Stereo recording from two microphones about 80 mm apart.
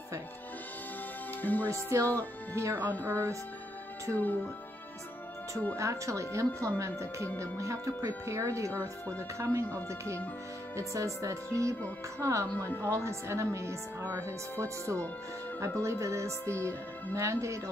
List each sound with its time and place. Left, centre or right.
1.4 s music: left
1.9 s speech: right
2.9 s speech: left
5.8 s speech: right
8.7 s speech: centre
9.4 s speech: right
12.5 s speech: left
12.8 s speech: right